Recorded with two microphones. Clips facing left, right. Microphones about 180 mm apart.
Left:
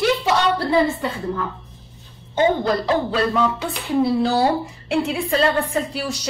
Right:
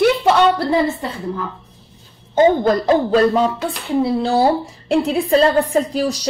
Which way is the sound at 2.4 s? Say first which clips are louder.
Right 5 dB; 45° right (ahead or behind).